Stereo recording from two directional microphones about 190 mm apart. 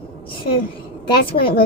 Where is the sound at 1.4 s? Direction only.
25° left (ahead or behind).